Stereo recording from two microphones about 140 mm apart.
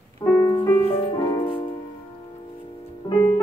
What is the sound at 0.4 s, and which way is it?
Music, 20° left (ahead or behind).